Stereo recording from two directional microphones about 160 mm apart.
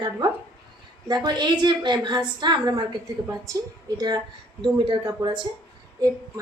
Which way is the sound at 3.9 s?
25° right (ahead or behind).